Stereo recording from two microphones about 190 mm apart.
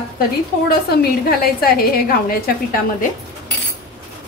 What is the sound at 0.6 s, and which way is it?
Speech, 55° left (ahead or behind).